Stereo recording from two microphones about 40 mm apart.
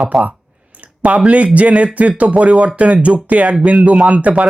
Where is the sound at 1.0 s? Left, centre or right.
Right.